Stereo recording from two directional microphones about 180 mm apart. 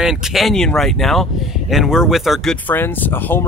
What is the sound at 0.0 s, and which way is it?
Speech, centre (ahead or behind).